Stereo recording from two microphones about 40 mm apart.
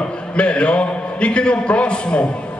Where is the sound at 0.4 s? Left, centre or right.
Left.